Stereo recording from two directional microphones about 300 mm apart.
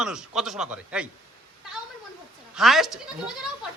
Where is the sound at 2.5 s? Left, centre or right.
Centre.